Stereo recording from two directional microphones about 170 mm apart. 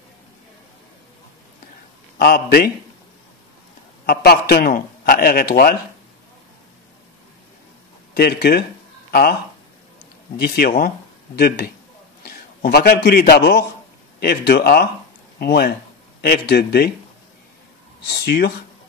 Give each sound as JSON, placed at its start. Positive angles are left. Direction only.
{"t": 2.1, "sound": "a man's voice", "side_deg": 65}
{"t": 4.0, "sound": "a man's voice", "side_deg": 65}
{"t": 8.1, "sound": "a man's voice", "side_deg": 65}
{"t": 10.3, "sound": "a man's voice", "side_deg": 65}
{"t": 18.2, "sound": "a man's voice", "side_deg": 70}